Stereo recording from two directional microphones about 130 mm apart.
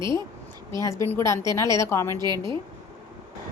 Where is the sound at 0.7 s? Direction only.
25° left (ahead or behind).